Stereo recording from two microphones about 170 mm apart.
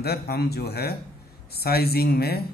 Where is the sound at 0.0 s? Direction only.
70° left (ahead or behind).